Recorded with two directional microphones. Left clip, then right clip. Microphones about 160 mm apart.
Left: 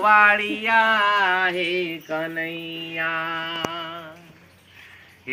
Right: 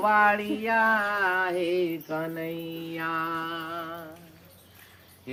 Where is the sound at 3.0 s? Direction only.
40° right (ahead or behind).